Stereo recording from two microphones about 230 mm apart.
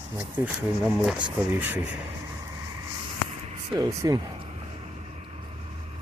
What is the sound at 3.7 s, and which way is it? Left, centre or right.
Speech, centre.